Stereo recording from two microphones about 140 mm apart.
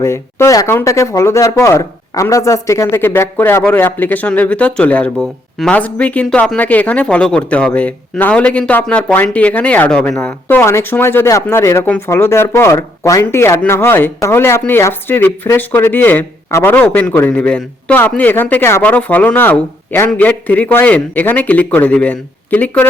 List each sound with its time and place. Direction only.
0.0 s speech: 20° left (ahead or behind)